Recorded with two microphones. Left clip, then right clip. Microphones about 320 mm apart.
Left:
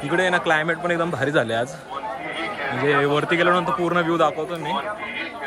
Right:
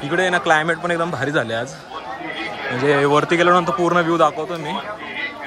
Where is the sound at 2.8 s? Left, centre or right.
Centre.